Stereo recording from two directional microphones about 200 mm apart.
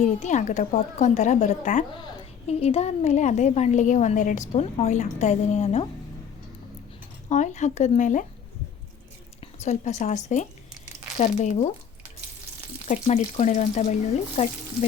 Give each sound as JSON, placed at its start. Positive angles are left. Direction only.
{"t": 0.0, "sound": "a woman's voice", "side_deg": 35}
{"t": 2.0, "sound": "a woman's voice", "side_deg": 25}
{"t": 7.3, "sound": "a woman's voice", "side_deg": 35}
{"t": 9.6, "sound": "a woman's voice", "side_deg": 35}
{"t": 12.9, "sound": "a woman's voice", "side_deg": 35}